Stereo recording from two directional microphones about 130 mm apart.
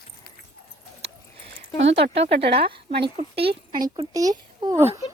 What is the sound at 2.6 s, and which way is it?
Speech, 45° right (ahead or behind).